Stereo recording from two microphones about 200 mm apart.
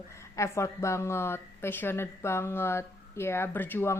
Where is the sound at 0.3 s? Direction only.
15° left (ahead or behind).